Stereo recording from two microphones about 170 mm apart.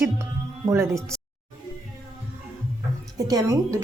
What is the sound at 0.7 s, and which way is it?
Speech, 15° right (ahead or behind).